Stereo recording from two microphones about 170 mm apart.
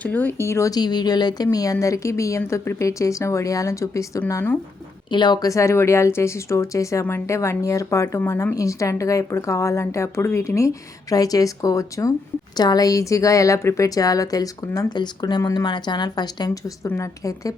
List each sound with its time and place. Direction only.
0.0 s speech: 10° left (ahead or behind)
5.0 s speech: 25° left (ahead or behind)